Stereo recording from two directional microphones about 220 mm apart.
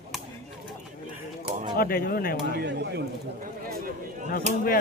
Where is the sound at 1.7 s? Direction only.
40° left (ahead or behind).